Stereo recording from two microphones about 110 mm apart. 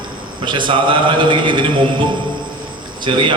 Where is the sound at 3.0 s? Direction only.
45° right (ahead or behind).